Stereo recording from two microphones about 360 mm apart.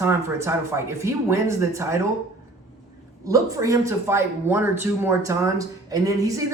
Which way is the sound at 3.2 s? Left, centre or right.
Centre.